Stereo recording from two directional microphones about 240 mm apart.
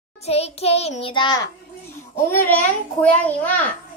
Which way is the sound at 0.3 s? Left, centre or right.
Left.